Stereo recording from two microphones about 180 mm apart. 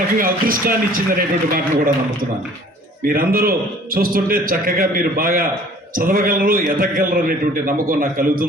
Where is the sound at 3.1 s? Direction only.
55° right (ahead or behind).